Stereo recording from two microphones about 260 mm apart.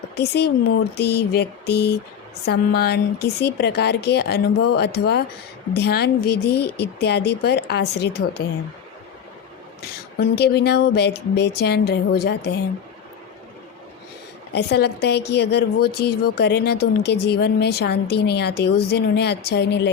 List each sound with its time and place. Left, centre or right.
0.2 s speech: left
10.3 s speech: left
14.5 s speech: left